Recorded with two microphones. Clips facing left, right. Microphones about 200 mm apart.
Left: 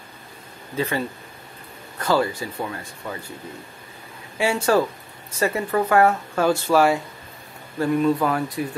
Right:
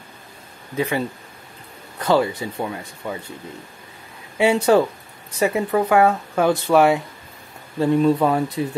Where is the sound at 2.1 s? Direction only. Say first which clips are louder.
Right 3 dB; 20° right (ahead or behind).